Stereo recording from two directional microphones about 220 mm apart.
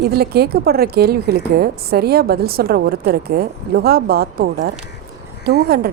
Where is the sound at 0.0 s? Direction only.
45° right (ahead or behind).